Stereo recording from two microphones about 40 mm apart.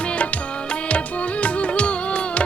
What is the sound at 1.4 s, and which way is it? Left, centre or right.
Music, left.